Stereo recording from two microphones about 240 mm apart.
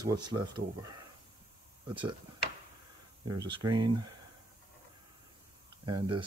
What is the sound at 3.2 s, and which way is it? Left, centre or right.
Speech, centre.